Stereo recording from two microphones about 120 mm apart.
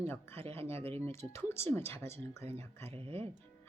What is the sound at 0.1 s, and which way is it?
Speech, 20° left (ahead or behind).